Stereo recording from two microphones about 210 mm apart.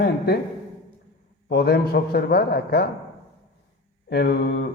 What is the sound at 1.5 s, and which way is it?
A man's voice, 50° left (ahead or behind).